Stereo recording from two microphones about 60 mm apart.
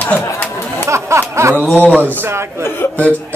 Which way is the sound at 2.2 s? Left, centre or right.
Right.